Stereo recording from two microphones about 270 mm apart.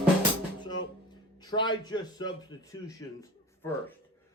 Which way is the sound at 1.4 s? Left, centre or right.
Centre.